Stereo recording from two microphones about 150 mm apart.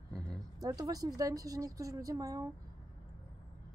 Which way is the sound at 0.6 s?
25° right (ahead or behind).